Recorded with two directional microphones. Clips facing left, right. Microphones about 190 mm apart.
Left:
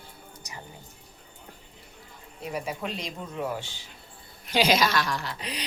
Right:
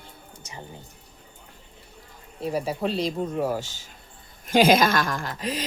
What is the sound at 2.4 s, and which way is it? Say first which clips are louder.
Speech: right 6 dB; 35° right (ahead or behind).